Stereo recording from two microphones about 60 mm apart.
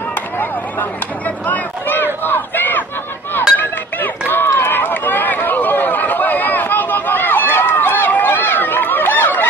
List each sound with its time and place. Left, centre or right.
0.1 s a sound: left
2.2 s crowd: left
4.3 s run: left